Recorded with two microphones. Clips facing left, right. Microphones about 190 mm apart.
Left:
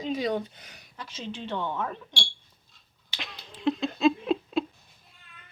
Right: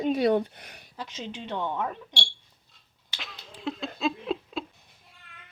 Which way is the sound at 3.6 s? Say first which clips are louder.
Left 6 dB; centre (ahead or behind).